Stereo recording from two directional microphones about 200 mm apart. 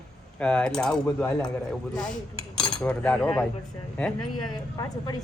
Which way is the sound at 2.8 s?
5° left (ahead or behind).